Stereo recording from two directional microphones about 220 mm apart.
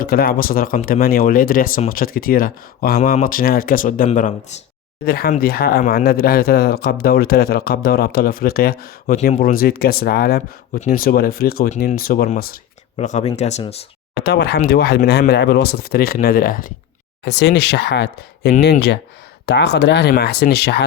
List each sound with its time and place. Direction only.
0.0 s speech: 40° left (ahead or behind)
5.0 s speech: 45° left (ahead or behind)
13.0 s speech: 30° left (ahead or behind)
14.2 s speech: 45° left (ahead or behind)
17.2 s speech: 50° left (ahead or behind)